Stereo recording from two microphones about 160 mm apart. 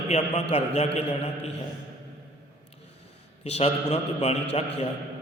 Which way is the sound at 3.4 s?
40° left (ahead or behind).